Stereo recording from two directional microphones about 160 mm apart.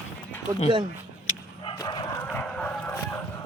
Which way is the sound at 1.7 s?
25° left (ahead or behind).